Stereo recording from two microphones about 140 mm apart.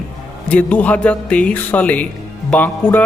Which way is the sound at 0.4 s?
10° left (ahead or behind).